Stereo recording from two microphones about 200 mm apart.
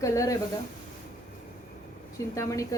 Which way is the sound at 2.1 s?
15° left (ahead or behind).